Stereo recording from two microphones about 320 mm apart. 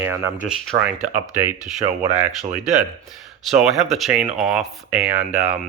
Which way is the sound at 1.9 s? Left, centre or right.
Right.